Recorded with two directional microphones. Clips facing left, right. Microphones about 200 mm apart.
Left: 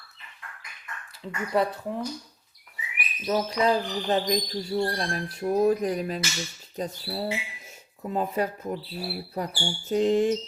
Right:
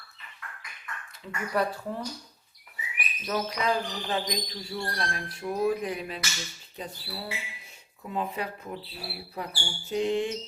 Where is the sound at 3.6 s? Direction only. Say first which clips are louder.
Left 5 dB; 35° left (ahead or behind).